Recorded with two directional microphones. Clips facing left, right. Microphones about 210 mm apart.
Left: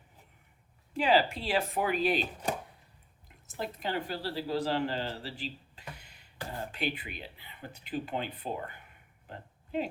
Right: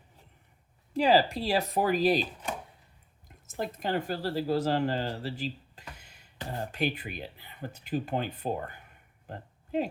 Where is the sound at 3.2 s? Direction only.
45° right (ahead or behind).